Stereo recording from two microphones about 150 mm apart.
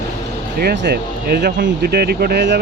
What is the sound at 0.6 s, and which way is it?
Speech, 90° right.